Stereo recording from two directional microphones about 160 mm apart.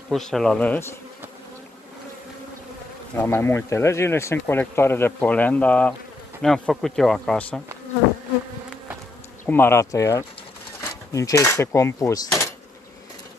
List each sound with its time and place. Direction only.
0.1 s speech: 5° left (ahead or behind)
3.2 s speech: 15° left (ahead or behind)
9.5 s speech: 15° left (ahead or behind)